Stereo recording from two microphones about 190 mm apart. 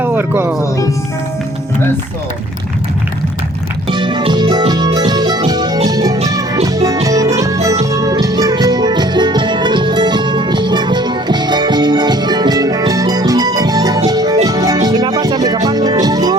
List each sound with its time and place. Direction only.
0.0 s speech: 10° right (ahead or behind)
3.8 s music: 25° right (ahead or behind)